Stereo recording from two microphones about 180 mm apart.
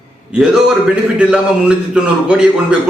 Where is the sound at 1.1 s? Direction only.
5° right (ahead or behind).